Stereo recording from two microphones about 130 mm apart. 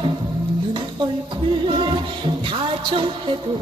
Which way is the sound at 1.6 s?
40° right (ahead or behind).